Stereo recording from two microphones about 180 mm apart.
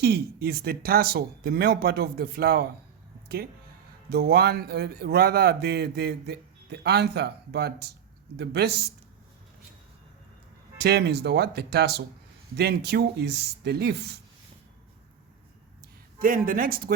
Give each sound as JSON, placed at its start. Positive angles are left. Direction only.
{"t": 0.0, "sound": "a man's voice", "side_deg": -65}
{"t": 4.1, "sound": "a man's voice", "side_deg": -60}
{"t": 10.8, "sound": "speech", "side_deg": -70}
{"t": 16.1, "sound": "speech", "side_deg": -50}